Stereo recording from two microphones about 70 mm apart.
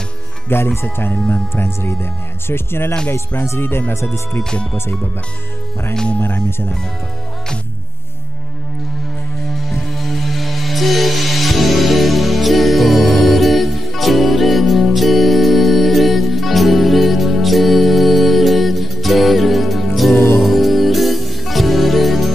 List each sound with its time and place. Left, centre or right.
0.7 s speech: left
4.4 s speech: centre
6.1 s speech: left
9.5 s music: centre